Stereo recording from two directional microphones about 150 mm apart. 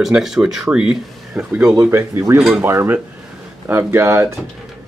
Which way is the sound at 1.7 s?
15° right (ahead or behind).